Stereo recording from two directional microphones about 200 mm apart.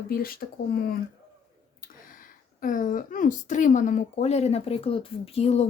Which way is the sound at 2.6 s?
40° left (ahead or behind).